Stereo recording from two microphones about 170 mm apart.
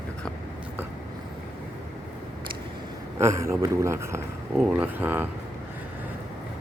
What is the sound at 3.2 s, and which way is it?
Speech, 15° right (ahead or behind).